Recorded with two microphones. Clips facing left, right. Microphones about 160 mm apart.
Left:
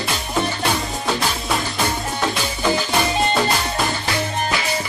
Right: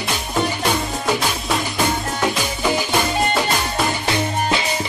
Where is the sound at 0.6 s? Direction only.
Centre (ahead or behind).